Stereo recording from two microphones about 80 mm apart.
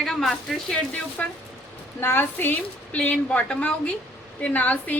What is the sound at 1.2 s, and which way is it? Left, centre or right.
Speech, centre.